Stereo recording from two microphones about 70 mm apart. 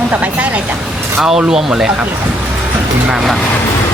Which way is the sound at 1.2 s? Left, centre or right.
Centre.